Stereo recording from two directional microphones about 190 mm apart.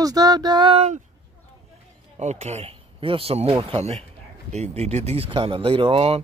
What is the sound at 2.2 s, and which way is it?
Speech, 35° right (ahead or behind).